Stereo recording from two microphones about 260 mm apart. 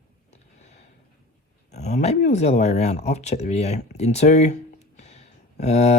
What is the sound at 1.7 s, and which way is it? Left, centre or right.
Speech, left.